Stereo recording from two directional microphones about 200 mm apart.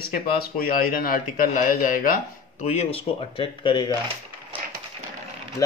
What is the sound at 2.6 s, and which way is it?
Speech, 30° left (ahead or behind).